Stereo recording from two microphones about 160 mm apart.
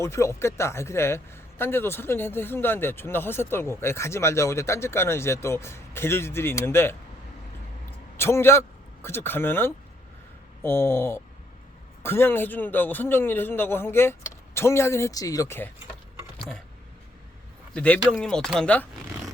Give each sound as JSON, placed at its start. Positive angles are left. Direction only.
{"t": 0.0, "sound": "a man's voice", "side_deg": 15}
{"t": 7.9, "sound": "a sound", "side_deg": 15}
{"t": 9.0, "sound": "a man's voice", "side_deg": 15}
{"t": 17.7, "sound": "a man's voice", "side_deg": 10}